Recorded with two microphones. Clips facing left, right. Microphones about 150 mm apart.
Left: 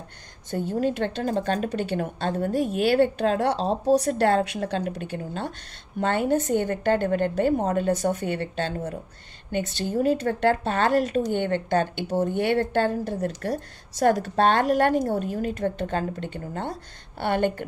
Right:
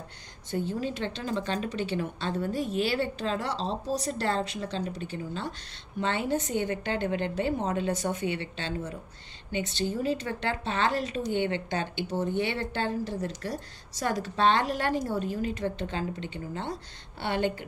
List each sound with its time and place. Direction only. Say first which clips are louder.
0.5 s speech: left 6 dB; 50° left (ahead or behind)